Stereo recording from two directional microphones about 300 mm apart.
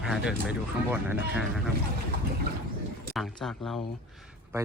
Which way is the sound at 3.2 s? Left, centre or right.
Centre.